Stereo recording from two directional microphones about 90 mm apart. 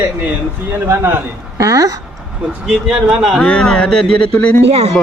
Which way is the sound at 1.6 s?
40° right (ahead or behind).